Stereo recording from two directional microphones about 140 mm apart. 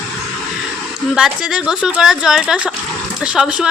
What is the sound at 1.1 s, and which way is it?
Speech, 5° right (ahead or behind).